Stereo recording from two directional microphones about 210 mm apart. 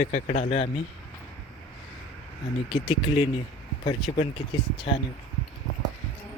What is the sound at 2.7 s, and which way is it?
Speech, 25° left (ahead or behind).